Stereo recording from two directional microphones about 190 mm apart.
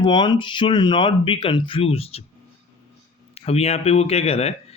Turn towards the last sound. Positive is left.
turn(degrees=35)  # may be behind; listen again after turning